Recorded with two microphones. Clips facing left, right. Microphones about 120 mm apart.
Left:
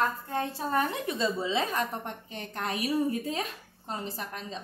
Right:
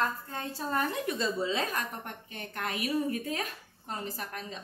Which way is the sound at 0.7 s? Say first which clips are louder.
Left 2 dB; 25° left (ahead or behind).